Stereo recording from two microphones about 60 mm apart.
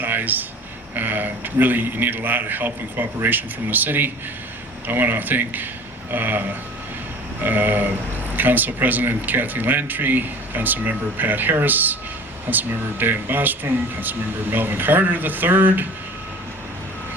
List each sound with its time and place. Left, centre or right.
0.0 s a sound: right
0.9 s speech: right
7.4 s speech: right